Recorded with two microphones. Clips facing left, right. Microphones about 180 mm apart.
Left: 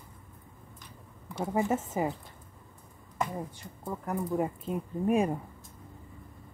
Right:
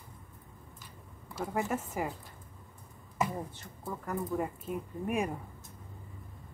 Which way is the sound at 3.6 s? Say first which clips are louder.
Left 3 dB; 15° left (ahead or behind).